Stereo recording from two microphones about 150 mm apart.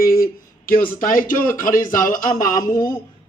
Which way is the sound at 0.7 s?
70° left (ahead or behind).